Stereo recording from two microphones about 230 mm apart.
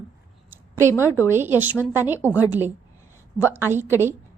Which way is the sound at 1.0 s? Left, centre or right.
Centre.